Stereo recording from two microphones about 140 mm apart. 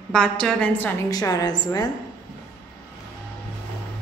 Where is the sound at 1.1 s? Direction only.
25° left (ahead or behind).